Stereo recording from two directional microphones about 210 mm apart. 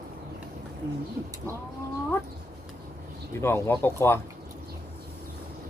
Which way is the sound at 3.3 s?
10° left (ahead or behind).